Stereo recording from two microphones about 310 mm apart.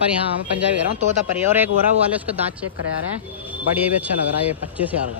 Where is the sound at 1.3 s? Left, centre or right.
Centre.